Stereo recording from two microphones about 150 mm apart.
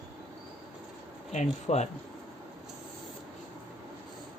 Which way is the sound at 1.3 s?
50° left (ahead or behind).